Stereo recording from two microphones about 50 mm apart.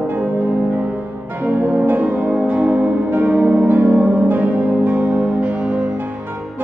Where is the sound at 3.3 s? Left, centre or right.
Right.